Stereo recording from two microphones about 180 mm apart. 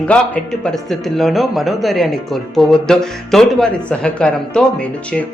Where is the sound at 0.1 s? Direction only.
5° left (ahead or behind).